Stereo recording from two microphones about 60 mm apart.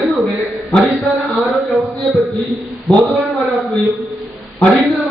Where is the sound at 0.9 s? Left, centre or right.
Centre.